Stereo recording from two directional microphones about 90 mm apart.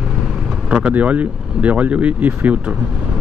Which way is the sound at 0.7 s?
10° right (ahead or behind).